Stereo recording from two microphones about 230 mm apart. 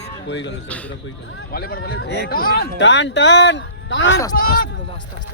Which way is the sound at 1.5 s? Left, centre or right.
Left.